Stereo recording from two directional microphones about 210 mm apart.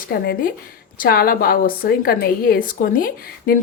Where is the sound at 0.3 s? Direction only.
40° left (ahead or behind).